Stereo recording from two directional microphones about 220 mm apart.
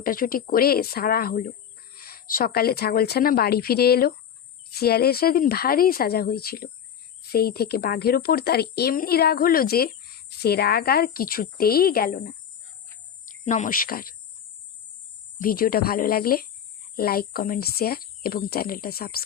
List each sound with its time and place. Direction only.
0.0 s speech: 40° left (ahead or behind)
15.4 s speech: 40° left (ahead or behind)